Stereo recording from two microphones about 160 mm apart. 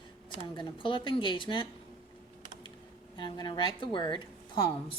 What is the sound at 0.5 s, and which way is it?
Speech, 30° left (ahead or behind).